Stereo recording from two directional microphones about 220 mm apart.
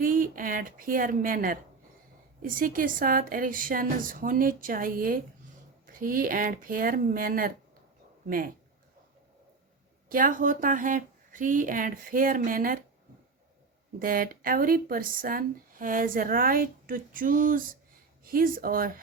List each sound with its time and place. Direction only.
0.0 s speech: 40° right (ahead or behind)
10.1 s speech: 40° right (ahead or behind)
14.0 s speech: 40° right (ahead or behind)